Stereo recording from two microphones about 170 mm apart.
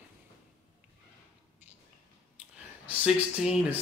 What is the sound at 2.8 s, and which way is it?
Speech, 5° right (ahead or behind).